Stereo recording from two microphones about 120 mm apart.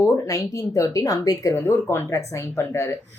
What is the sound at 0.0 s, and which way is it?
A woman's voice, 30° left (ahead or behind).